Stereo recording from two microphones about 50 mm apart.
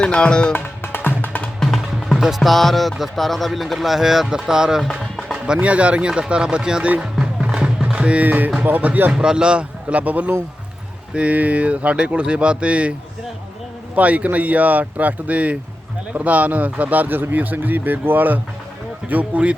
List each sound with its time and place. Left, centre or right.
0.0 s speech: centre
0.5 s music: left
1.5 s music: centre
2.1 s music: centre
2.4 s speech: centre
5.5 s speech: right
7.4 s a sound: centre
8.6 s speech: right
9.1 s speech: centre
13.9 s speech: right
19.0 s speech: right